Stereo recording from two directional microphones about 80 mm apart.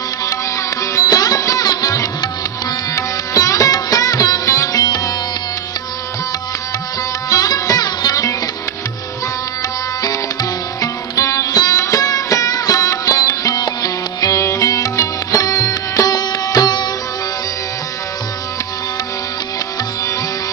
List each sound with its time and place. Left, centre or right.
0.9 s music: left
4.7 s sitar: left
7.2 s music: left
10.8 s music: left